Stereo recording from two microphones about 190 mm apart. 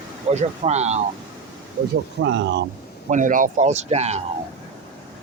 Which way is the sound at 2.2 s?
70° right (ahead or behind).